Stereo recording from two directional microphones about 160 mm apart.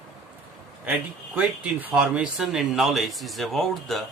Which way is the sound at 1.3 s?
10° right (ahead or behind).